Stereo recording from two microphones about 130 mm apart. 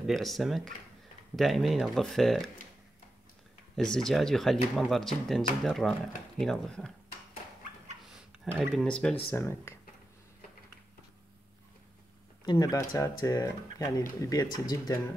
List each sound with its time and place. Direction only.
0.0 s speech: centre (ahead or behind)
3.7 s speech: 5° left (ahead or behind)
8.5 s speech: 5° left (ahead or behind)
9.3 s speech: 20° left (ahead or behind)
12.4 s speech: 30° left (ahead or behind)